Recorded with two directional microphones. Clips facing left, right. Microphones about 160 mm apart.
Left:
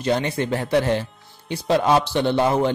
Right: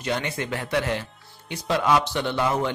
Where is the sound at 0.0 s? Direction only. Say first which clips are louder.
Left 6 dB; 30° left (ahead or behind).